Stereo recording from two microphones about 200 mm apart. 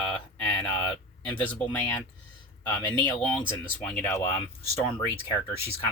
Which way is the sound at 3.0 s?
10° left (ahead or behind).